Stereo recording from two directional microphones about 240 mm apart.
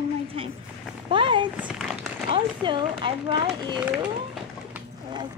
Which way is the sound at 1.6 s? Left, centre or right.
Centre.